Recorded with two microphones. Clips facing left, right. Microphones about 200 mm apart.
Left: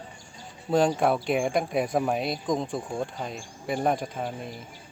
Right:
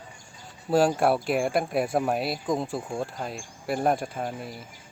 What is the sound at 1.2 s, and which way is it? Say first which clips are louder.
Speech: even; 5° right (ahead or behind).